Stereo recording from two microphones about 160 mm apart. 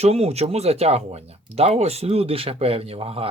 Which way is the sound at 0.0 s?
40° right (ahead or behind).